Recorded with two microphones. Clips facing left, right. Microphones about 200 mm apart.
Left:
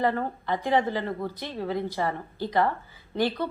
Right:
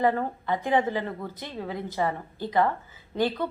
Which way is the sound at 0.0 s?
20° right (ahead or behind).